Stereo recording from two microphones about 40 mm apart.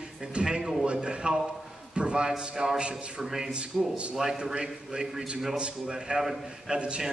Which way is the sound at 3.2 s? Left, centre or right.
Centre.